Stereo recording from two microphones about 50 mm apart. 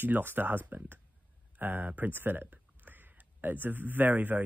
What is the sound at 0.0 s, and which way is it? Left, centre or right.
Speech, right.